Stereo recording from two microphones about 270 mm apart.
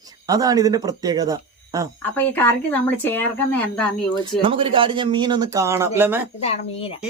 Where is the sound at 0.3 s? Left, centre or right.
Centre.